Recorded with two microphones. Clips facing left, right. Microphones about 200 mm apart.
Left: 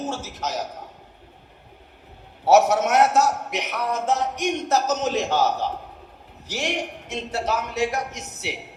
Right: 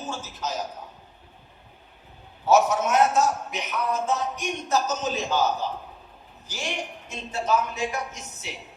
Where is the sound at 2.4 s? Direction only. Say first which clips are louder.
Left 3 dB; 70° left (ahead or behind).